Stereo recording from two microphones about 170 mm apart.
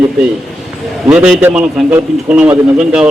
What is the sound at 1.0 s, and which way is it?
A man's voice, 10° right (ahead or behind).